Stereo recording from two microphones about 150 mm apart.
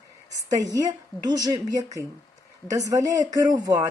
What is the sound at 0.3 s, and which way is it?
A woman's voice, 25° right (ahead or behind).